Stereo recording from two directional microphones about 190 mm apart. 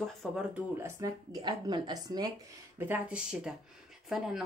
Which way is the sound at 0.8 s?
20° right (ahead or behind).